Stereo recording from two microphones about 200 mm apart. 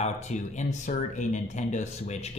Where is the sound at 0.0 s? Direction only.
35° left (ahead or behind).